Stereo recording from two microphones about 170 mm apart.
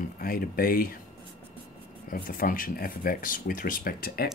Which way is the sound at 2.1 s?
55° left (ahead or behind).